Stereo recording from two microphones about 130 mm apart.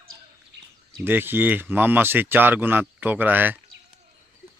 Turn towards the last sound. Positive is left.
turn(degrees=-15)  # may be behind; listen again after turning